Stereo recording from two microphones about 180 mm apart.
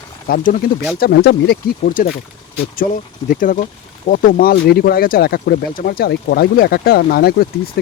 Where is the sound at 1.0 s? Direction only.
65° left (ahead or behind).